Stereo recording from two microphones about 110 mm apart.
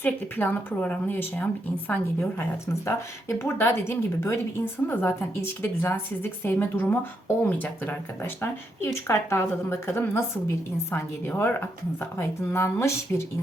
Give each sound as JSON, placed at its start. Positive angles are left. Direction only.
{"t": 0.0, "sound": "speech", "side_deg": 15}